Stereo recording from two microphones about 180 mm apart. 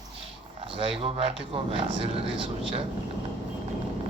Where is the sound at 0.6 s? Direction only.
30° right (ahead or behind).